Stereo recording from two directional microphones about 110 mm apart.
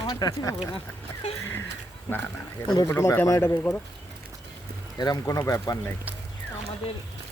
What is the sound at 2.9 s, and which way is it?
Speech, 25° left (ahead or behind).